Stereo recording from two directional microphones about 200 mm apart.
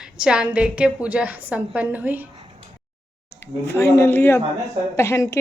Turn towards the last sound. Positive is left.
turn(degrees=15)  # may be behind; listen again after turning